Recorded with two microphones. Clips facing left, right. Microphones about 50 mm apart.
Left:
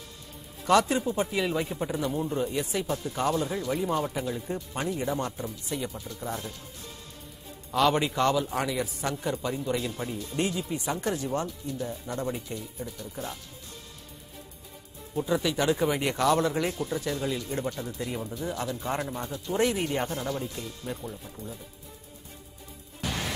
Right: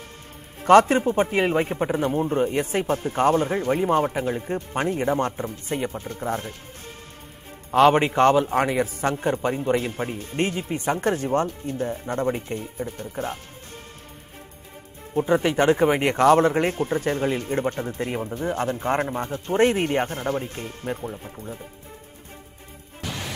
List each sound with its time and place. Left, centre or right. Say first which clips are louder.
0.6 s speech: right 8 dB; right
7.7 s speech: right 8 dB; right
15.1 s speech: right 7 dB; right